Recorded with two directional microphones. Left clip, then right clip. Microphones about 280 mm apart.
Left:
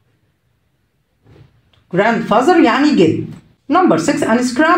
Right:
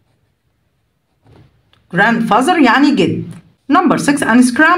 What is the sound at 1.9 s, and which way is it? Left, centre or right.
A woman's voice, right.